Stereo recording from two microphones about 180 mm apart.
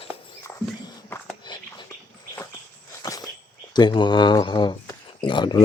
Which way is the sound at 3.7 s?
25° left (ahead or behind).